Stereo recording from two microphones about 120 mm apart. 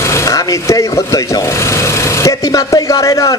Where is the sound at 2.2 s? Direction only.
30° left (ahead or behind).